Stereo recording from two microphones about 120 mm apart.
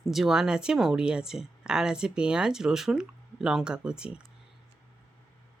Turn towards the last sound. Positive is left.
turn(degrees=-5)  # may be behind; listen again after turning